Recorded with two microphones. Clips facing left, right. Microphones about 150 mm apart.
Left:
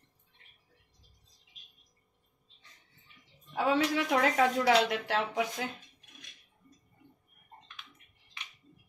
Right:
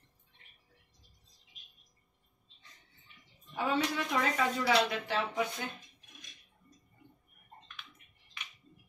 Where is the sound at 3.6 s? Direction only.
80° left.